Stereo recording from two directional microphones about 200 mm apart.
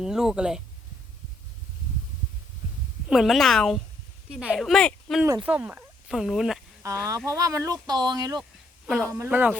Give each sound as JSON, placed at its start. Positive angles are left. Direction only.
{"t": 0.0, "sound": "speech", "side_deg": -5}
{"t": 3.1, "sound": "speech", "side_deg": 0}
{"t": 6.8, "sound": "speech", "side_deg": -15}